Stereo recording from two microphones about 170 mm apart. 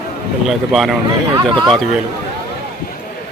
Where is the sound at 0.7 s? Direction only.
Centre (ahead or behind).